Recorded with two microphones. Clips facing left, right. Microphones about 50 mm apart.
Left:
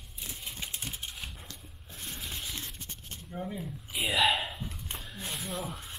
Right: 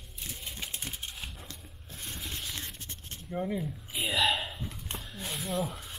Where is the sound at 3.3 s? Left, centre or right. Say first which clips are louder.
Right 5 dB; centre.